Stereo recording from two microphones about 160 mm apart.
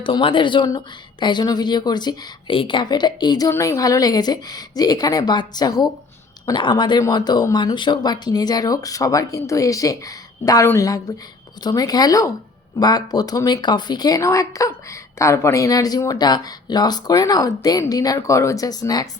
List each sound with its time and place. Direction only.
0.0 s speech: 30° left (ahead or behind)